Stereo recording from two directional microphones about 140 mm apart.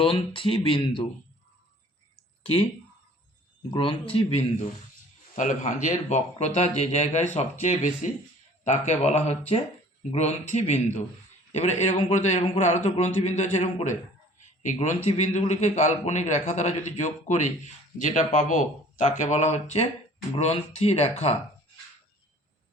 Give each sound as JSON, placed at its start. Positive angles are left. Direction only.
{"t": 0.0, "sound": "speech", "side_deg": 40}
{"t": 2.4, "sound": "speech", "side_deg": 40}
{"t": 3.7, "sound": "speech", "side_deg": 40}
{"t": 5.3, "sound": "a man's voice", "side_deg": 65}
{"t": 12.4, "sound": "speech", "side_deg": 50}
{"t": 14.6, "sound": "a man's voice", "side_deg": 60}